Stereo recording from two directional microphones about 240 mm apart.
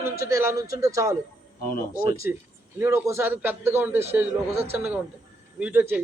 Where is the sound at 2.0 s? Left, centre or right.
Left.